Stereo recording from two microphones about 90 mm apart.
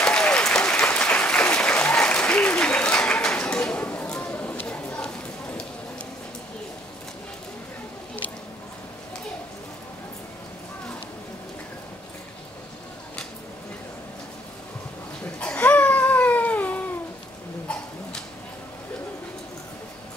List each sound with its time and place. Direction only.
0.0 s applause: 10° left (ahead or behind)
15.3 s cat: 15° left (ahead or behind)